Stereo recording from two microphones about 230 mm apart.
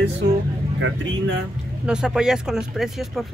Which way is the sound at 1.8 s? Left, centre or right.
Centre.